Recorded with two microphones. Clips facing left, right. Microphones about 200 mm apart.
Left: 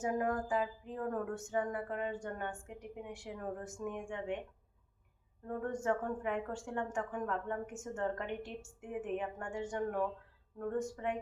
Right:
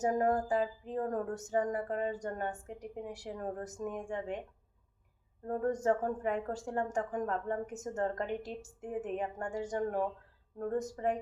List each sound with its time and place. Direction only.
0.0 s a woman's voice: 40° right (ahead or behind)
5.5 s a woman's voice: 35° right (ahead or behind)